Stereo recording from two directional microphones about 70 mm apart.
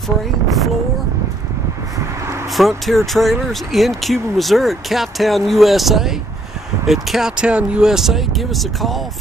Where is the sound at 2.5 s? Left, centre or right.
Centre.